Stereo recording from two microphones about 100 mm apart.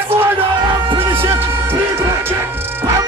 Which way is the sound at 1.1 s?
20° right (ahead or behind).